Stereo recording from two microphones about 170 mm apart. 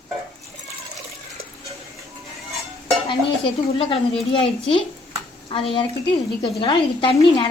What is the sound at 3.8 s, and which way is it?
A woman's voice, 30° left (ahead or behind).